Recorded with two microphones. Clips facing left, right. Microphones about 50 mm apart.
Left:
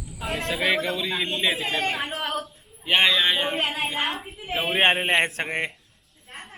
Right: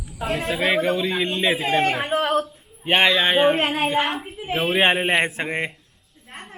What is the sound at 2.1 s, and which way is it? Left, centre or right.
Speech, right.